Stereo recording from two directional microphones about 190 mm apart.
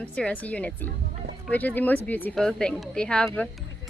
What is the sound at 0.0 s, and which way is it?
Speech, 5° left (ahead or behind).